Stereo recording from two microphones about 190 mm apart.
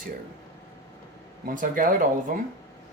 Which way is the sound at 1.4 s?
45° right (ahead or behind).